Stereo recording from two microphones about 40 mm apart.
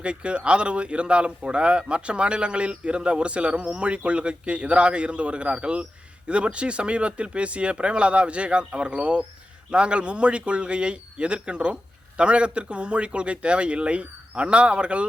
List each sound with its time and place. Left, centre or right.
0.0 s a man's voice: right